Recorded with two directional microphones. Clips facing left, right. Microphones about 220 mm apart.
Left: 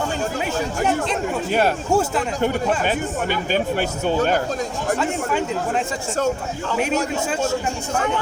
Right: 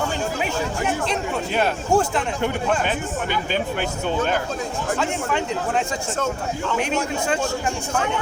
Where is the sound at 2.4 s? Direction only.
40° left (ahead or behind).